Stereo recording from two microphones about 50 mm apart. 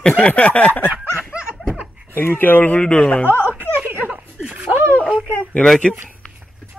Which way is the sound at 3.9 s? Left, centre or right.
Right.